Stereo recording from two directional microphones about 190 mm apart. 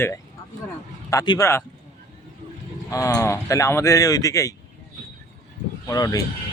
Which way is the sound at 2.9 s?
15° left (ahead or behind).